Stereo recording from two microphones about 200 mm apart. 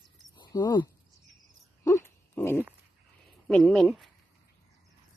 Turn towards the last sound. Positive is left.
turn(degrees=0)  # may be behind; listen again after turning